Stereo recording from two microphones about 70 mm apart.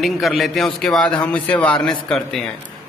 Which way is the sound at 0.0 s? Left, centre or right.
Centre.